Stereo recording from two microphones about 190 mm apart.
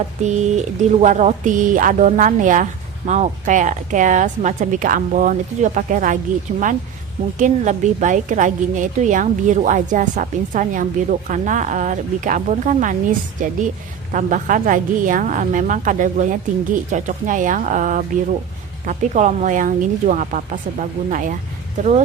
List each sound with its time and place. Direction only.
0.2 s a woman's voice: 40° right (ahead or behind)
7.3 s a woman's voice: 40° right (ahead or behind)